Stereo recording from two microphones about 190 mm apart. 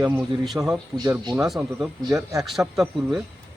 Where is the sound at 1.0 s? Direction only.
20° right (ahead or behind).